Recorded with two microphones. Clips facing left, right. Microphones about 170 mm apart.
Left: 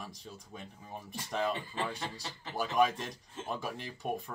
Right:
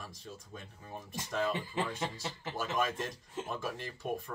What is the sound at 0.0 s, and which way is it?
Speech, 15° left (ahead or behind).